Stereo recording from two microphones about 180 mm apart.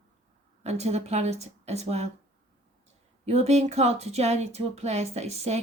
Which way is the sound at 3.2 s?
35° right (ahead or behind).